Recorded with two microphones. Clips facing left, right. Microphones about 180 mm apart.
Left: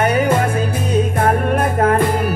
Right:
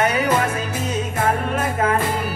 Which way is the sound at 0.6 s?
55° left (ahead or behind).